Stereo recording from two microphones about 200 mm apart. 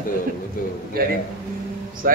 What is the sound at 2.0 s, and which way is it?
Speech, 45° right (ahead or behind).